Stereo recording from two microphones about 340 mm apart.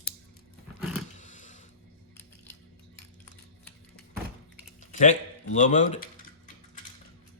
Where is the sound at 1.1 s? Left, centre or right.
Left.